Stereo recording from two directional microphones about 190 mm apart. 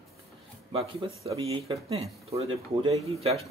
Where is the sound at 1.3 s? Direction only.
30° right (ahead or behind).